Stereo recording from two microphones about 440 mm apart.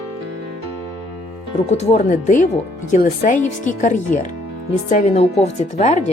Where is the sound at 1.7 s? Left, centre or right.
Centre.